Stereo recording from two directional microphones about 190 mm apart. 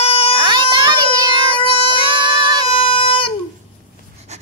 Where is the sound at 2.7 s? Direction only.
30° left (ahead or behind).